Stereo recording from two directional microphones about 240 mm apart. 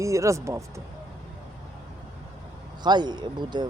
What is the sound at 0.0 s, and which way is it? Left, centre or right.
Speech, centre.